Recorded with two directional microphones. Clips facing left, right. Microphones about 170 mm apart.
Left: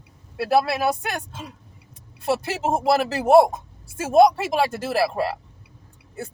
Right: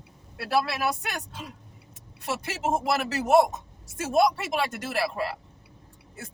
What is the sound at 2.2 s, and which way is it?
Speech, 35° left (ahead or behind).